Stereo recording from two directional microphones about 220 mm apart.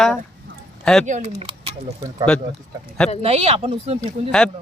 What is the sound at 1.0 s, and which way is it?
Speech, 30° right (ahead or behind).